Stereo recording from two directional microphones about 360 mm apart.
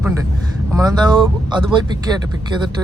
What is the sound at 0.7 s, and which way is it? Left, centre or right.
A man's voice, centre.